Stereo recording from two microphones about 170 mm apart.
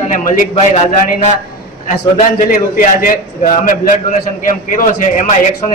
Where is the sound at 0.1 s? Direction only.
50° left (ahead or behind).